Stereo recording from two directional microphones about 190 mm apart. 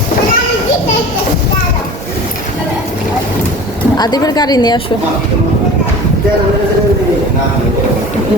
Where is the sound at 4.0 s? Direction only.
20° left (ahead or behind).